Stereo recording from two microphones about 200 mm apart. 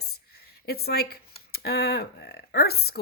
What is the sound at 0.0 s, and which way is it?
Speech, 50° left (ahead or behind).